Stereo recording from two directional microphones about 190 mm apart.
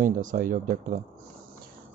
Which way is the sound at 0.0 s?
45° right (ahead or behind).